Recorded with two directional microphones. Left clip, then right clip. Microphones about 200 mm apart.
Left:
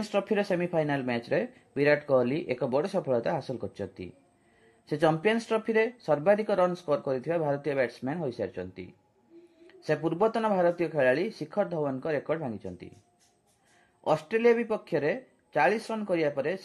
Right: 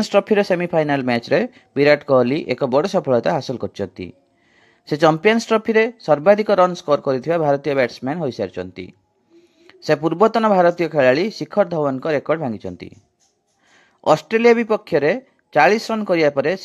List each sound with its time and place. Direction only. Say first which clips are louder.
0.0 s speech: right 12 dB; 35° right (ahead or behind)
14.0 s speech: right 10 dB; 35° right (ahead or behind)